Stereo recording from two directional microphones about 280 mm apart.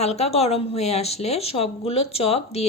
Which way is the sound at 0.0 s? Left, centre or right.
Left.